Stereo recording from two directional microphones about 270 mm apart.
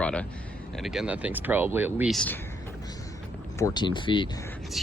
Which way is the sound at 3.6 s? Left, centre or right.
Centre.